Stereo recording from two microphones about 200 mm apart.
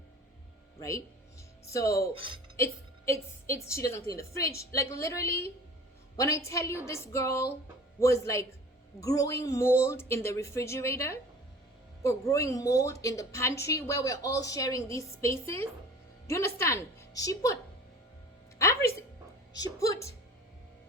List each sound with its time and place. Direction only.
0.8 s a woman's voice: 15° left (ahead or behind)
3.1 s a woman's voice: 15° left (ahead or behind)
18.6 s a woman's voice: 15° left (ahead or behind)